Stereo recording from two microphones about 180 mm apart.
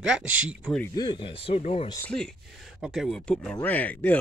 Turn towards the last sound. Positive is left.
turn(degrees=10)  # may be behind; listen again after turning